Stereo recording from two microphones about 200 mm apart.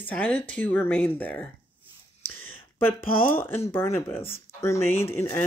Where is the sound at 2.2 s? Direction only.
10° left (ahead or behind).